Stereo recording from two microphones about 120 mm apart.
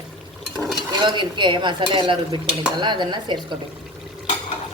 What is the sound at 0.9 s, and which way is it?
Stir, 40° right (ahead or behind).